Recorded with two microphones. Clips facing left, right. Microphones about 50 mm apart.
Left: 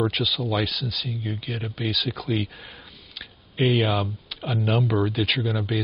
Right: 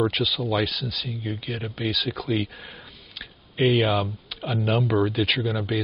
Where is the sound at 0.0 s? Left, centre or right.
Centre.